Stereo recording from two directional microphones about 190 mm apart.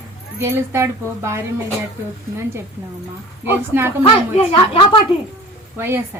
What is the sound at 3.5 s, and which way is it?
Speech, 10° right (ahead or behind).